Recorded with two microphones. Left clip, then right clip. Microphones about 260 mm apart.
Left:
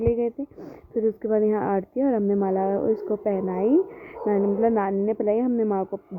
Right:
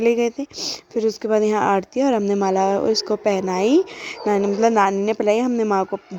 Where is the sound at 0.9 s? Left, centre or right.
Right.